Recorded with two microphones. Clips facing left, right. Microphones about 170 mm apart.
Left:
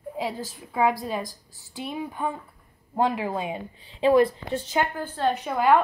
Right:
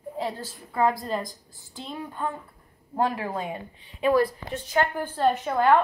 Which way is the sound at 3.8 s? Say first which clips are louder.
Left 3 dB; 30° left (ahead or behind).